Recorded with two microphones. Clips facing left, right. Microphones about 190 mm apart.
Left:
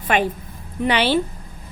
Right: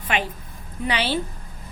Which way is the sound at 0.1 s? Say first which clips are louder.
Left 6 dB; 50° left (ahead or behind).